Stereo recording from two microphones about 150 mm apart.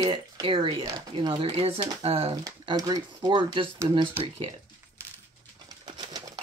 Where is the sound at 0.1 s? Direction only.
35° right (ahead or behind).